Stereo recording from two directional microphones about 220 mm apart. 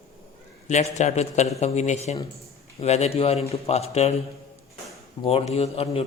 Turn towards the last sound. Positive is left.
turn(degrees=25)  # may be behind; listen again after turning